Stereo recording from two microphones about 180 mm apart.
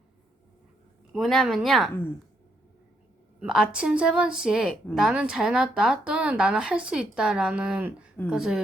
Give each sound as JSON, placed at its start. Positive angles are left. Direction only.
{"t": 1.1, "sound": "a woman's voice", "side_deg": 0}
{"t": 3.4, "sound": "a woman's voice", "side_deg": -5}